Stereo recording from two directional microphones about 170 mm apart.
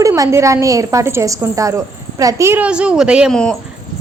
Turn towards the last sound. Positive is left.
turn(degrees=-5)  # may be behind; listen again after turning